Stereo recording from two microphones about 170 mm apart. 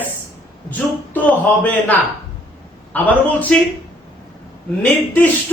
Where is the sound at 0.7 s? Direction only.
10° left (ahead or behind).